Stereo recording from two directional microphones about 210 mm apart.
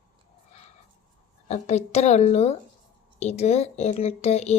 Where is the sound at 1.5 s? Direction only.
30° left (ahead or behind).